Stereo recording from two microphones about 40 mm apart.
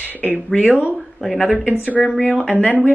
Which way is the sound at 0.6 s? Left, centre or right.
Right.